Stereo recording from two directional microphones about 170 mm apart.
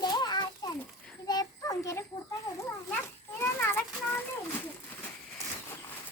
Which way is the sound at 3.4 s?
10° left (ahead or behind).